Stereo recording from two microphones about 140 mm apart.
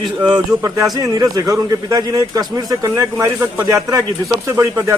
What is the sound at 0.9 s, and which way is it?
A man's voice, 25° right (ahead or behind).